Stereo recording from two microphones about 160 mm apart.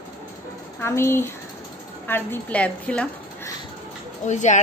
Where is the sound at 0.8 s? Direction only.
15° left (ahead or behind).